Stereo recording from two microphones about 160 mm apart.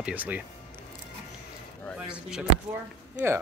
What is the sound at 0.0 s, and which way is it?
Speech, 10° right (ahead or behind).